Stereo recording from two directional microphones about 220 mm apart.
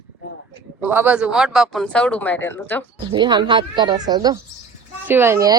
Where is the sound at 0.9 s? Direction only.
5° right (ahead or behind); by 2.8 s 10° left (ahead or behind).